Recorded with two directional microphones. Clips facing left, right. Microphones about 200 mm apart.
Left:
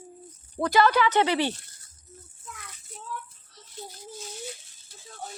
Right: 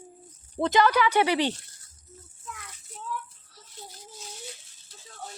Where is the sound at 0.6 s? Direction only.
15° right (ahead or behind).